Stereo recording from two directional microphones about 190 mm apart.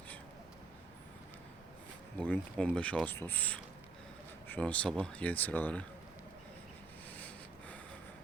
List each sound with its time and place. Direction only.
2.1 s speech: 5° left (ahead or behind)
7.2 s snort: 10° left (ahead or behind)